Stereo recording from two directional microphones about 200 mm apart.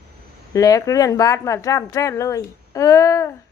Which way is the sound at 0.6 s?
15° left (ahead or behind).